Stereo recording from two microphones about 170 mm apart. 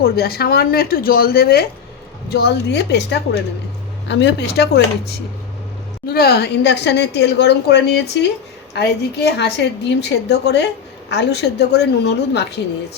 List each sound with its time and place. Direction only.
0.0 s speech: 65° left (ahead or behind)
6.1 s a woman's voice: 65° left (ahead or behind); by 13.0 s 85° left